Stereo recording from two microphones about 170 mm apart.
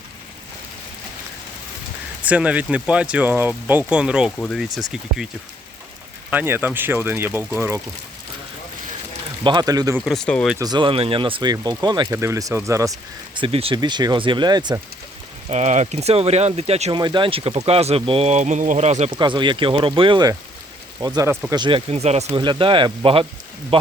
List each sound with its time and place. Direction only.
2.2 s speech: 10° right (ahead or behind)
6.3 s speech: 10° right (ahead or behind)
9.4 s speech: 25° right (ahead or behind)
9.9 s speech: centre (ahead or behind)
10.6 s speech: 25° right (ahead or behind)
13.3 s speech: 30° right (ahead or behind)
15.4 s speech: 45° right (ahead or behind)
17.0 s speech: 25° right (ahead or behind)
19.1 s speech: 25° right (ahead or behind)
22.4 s speech: 30° right (ahead or behind)